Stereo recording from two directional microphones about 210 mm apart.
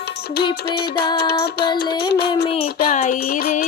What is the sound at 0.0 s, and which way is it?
Music, 50° left (ahead or behind).